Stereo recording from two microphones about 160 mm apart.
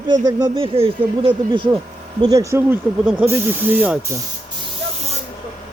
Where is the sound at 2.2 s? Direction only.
20° right (ahead or behind).